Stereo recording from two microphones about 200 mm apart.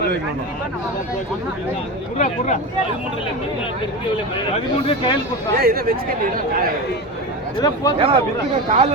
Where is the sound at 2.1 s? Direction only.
40° left (ahead or behind).